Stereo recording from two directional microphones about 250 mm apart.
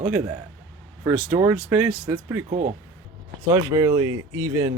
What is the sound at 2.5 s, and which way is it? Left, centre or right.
Speech, right.